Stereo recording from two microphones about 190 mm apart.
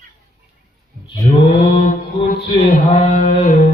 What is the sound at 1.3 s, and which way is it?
Mantra, 40° left (ahead or behind).